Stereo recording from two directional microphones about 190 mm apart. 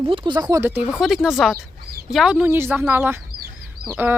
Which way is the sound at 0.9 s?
Centre (ahead or behind).